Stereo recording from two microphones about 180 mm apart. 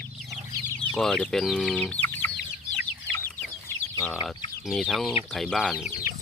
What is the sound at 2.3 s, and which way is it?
Chicken, 65° left (ahead or behind).